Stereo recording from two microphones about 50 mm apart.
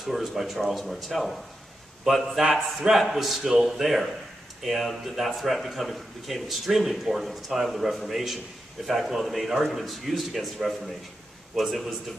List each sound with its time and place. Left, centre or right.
0.0 s speech: centre